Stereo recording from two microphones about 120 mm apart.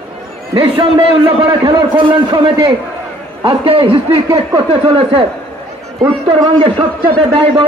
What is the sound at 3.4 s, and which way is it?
A man's voice, 50° right (ahead or behind).